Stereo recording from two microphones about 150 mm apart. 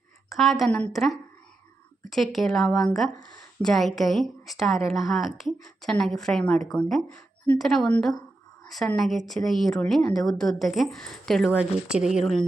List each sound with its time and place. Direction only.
0.3 s a woman's voice: centre (ahead or behind)
3.2 s speech: 25° left (ahead or behind)
3.6 s a woman's voice: centre (ahead or behind)